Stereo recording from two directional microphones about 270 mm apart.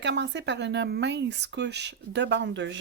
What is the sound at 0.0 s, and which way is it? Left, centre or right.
Speech, right.